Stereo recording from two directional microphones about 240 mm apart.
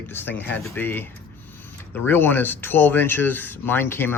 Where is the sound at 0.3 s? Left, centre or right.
Centre.